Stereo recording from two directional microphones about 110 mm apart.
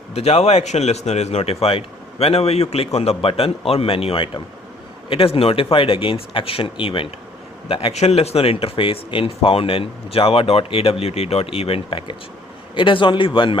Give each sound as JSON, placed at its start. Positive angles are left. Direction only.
{"t": 0.1, "sound": "speech", "side_deg": 70}